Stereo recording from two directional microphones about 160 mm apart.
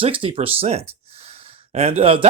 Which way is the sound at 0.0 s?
35° right (ahead or behind).